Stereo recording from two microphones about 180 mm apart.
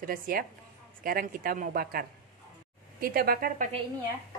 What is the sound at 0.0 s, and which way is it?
A woman's voice, 50° right (ahead or behind).